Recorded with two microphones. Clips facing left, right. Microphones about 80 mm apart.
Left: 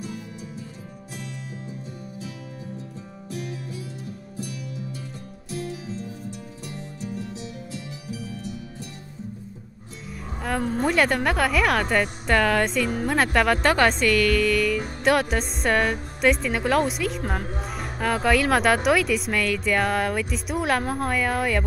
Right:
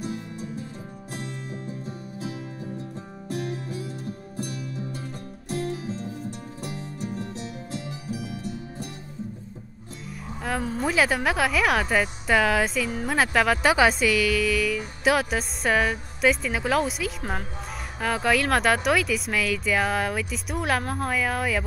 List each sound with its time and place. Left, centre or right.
3.3 s music: right
5.5 s music: right
10.4 s a woman's voice: centre